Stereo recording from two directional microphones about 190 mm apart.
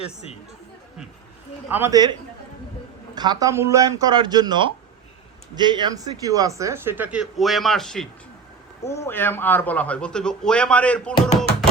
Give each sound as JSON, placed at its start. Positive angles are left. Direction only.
{"t": 0.0, "sound": "speech", "side_deg": 35}
{"t": 1.7, "sound": "speech", "side_deg": -15}
{"t": 3.2, "sound": "speech", "side_deg": -20}
{"t": 8.8, "sound": "a man's voice", "side_deg": 15}